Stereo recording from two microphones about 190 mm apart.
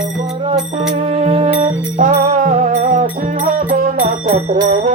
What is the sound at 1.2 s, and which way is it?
Music, 30° right (ahead or behind).